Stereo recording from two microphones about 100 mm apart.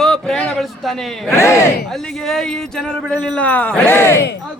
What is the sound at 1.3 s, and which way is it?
Speech, 30° left (ahead or behind).